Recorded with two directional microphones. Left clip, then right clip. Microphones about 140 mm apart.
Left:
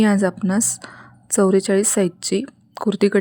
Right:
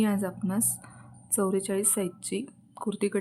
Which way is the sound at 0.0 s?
50° left (ahead or behind).